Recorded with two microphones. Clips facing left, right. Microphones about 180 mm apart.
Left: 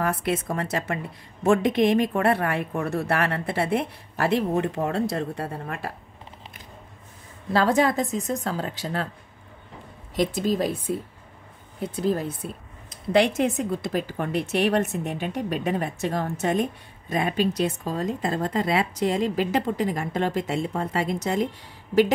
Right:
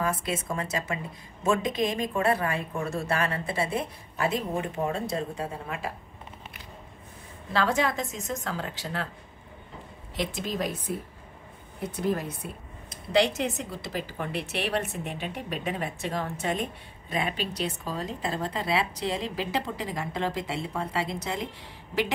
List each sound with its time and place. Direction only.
0.0 s a woman's voice: 60° left (ahead or behind)
7.5 s speech: 35° left (ahead or behind)
10.1 s speech: 40° left (ahead or behind)
11.9 s speech: 30° left (ahead or behind)
13.1 s speech: 50° left (ahead or behind)